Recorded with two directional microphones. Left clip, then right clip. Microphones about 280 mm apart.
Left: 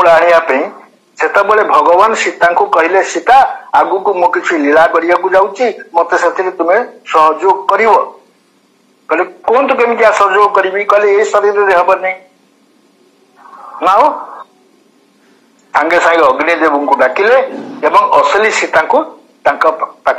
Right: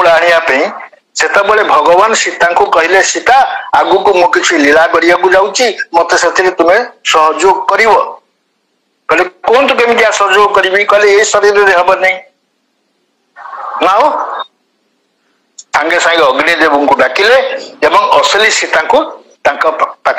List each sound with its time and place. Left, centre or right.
0.0 s a man's voice: right
13.4 s a sound: right
15.7 s a man's voice: right